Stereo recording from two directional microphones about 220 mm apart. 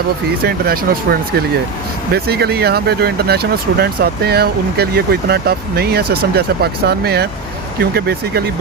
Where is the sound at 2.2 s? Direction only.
45° right (ahead or behind).